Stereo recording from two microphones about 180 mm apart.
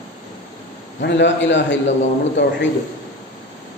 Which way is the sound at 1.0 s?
75° left (ahead or behind).